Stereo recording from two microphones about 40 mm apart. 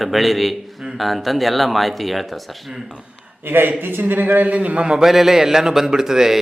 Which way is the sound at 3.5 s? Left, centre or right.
Right.